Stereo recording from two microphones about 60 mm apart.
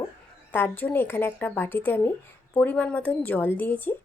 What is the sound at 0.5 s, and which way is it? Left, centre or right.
A woman's voice, left.